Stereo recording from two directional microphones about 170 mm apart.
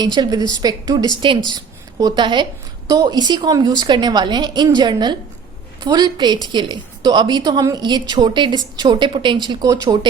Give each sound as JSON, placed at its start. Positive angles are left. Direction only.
{"t": 0.0, "sound": "a woman's voice", "side_deg": -25}